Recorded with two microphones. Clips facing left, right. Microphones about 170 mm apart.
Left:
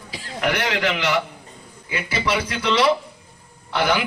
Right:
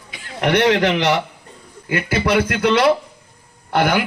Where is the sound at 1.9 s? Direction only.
55° right (ahead or behind).